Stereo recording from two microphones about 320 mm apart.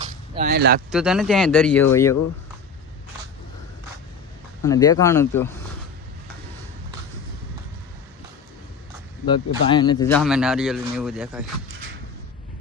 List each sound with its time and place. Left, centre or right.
0.0 s a sound: right
0.9 s speech: centre
4.6 s speech: centre
9.6 s speech: centre